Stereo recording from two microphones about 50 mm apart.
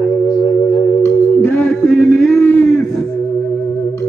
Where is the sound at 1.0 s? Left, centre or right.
Left.